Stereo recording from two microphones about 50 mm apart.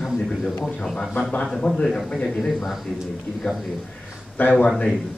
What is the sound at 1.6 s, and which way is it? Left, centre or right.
Speech, left.